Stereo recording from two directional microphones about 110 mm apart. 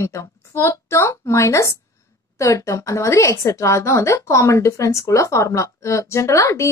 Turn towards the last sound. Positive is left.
turn(degrees=30)  # may be behind; listen again after turning